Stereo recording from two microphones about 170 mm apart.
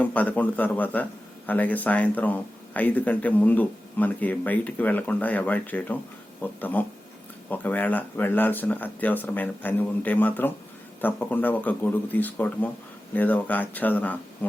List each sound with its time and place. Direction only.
0.0 s speech: 10° left (ahead or behind)